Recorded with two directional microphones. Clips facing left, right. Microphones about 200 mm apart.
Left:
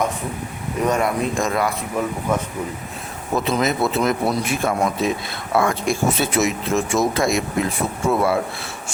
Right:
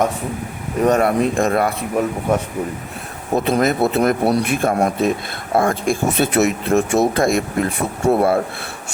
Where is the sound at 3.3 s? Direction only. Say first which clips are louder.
Right 4 dB; 55° right (ahead or behind).